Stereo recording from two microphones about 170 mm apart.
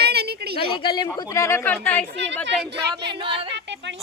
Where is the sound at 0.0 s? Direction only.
70° right (ahead or behind).